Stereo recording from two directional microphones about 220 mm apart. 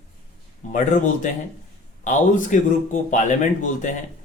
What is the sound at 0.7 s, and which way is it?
Speech, 35° left (ahead or behind).